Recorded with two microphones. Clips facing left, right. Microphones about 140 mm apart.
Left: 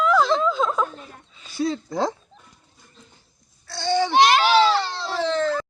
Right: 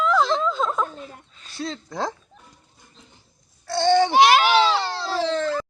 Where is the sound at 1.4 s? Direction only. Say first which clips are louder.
Left 7 dB; 5° left (ahead or behind).